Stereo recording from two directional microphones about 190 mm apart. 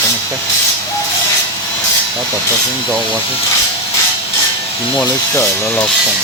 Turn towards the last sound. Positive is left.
turn(degrees=10)  # may be behind; listen again after turning